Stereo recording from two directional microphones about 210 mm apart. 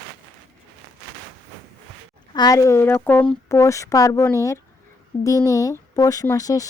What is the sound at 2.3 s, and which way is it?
Speech, 20° left (ahead or behind).